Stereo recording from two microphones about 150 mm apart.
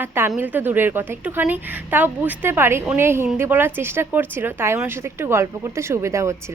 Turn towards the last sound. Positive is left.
turn(degrees=-20)  # may be behind; listen again after turning